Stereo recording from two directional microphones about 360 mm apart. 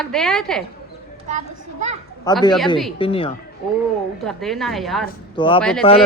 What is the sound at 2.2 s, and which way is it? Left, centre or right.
Speech, centre.